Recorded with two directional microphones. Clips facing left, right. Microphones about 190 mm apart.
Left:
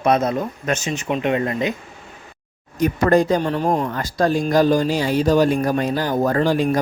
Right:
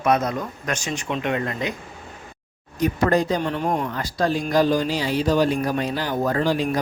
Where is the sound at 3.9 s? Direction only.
45° left (ahead or behind).